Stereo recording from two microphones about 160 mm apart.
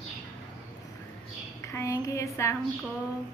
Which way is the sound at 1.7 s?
20° left (ahead or behind).